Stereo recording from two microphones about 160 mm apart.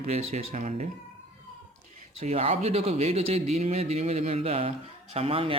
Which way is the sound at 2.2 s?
40° right (ahead or behind).